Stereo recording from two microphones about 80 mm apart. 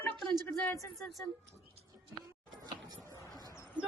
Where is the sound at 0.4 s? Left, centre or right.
Left.